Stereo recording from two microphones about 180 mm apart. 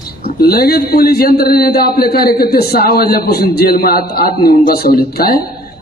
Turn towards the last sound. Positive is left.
turn(degrees=55)  # may be behind; listen again after turning